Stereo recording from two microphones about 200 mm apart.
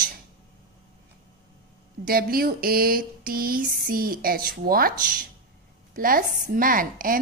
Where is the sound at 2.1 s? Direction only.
45° right (ahead or behind).